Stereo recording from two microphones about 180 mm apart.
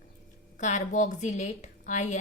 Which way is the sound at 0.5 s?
40° left (ahead or behind).